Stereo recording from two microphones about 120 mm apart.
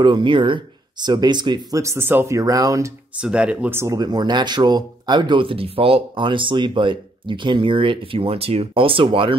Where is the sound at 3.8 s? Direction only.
30° right (ahead or behind).